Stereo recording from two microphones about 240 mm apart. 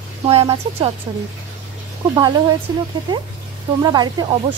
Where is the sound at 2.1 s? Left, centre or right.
Centre.